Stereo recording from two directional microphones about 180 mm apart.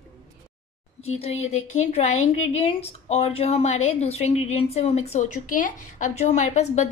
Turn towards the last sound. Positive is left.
turn(degrees=40)  # may be behind; listen again after turning